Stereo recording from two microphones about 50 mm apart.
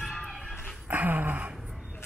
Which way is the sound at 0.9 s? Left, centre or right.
Right.